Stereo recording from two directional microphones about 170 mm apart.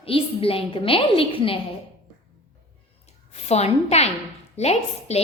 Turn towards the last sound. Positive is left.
turn(degrees=40)  # may be behind; listen again after turning